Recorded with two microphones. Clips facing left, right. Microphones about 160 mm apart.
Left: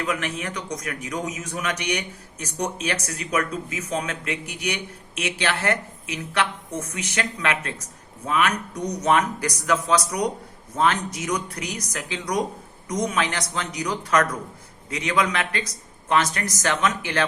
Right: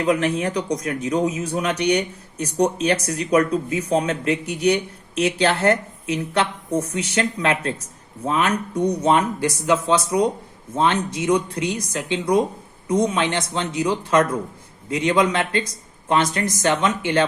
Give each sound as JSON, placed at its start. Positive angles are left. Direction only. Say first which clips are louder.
{"t": 0.0, "sound": "speech", "louder": "right 8 dB", "side_deg": -35}